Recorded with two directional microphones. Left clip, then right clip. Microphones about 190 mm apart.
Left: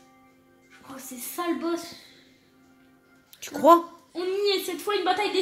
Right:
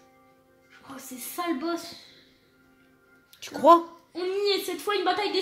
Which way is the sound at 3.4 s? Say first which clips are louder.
Even; 5° left (ahead or behind).